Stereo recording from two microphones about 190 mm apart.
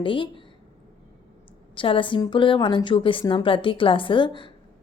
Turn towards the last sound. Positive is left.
turn(degrees=25)  # may be behind; listen again after turning